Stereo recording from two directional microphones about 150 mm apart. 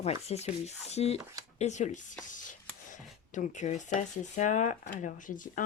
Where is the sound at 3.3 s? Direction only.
55° left (ahead or behind).